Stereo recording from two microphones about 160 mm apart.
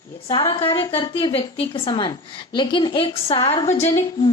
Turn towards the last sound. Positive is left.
turn(degrees=40)  # may be behind; listen again after turning